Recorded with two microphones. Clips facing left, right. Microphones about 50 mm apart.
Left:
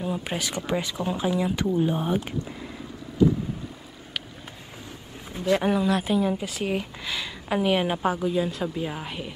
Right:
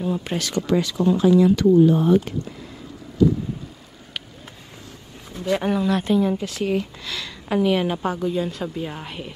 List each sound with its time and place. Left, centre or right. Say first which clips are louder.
0.0 s speech: right 4 dB; centre
0.7 s a woman's voice: right 9 dB; left
5.4 s a woman's voice: right 1 dB; centre